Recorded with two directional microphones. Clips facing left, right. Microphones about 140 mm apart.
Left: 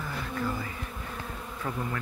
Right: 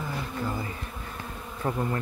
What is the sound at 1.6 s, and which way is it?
Bee, 35° right (ahead or behind).